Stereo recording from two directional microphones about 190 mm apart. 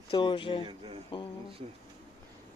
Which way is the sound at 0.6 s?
30° right (ahead or behind).